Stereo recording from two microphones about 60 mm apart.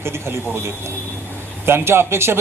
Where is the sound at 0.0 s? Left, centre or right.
Right.